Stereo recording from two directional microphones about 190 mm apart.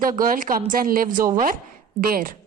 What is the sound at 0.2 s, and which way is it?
A woman's voice, 45° right (ahead or behind).